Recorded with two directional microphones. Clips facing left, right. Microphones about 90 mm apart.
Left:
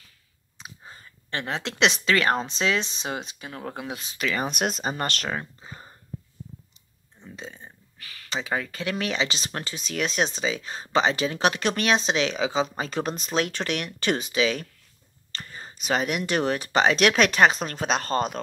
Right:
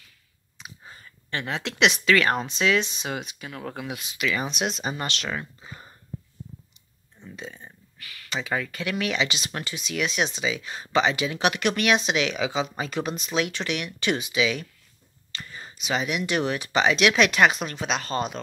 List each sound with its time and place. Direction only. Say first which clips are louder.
0.6 s speech: left 1 dB; 30° left (ahead or behind)
7.2 s speech: right 1 dB; 25° left (ahead or behind); by 18.4 s 45° left (ahead or behind)